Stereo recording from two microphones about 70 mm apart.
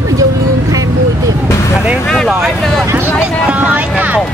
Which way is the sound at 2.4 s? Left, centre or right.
Centre.